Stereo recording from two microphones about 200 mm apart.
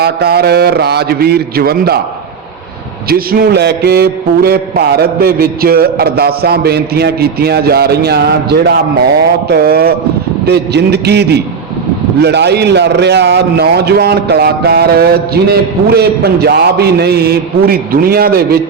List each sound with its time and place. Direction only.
0.0 s a man's voice: 50° right (ahead or behind)
3.1 s a man's voice: 50° right (ahead or behind)